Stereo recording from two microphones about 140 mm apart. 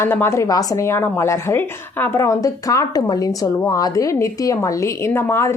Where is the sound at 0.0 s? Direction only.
15° left (ahead or behind).